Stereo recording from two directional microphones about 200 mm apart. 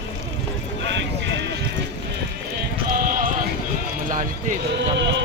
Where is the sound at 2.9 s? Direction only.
45° right (ahead or behind).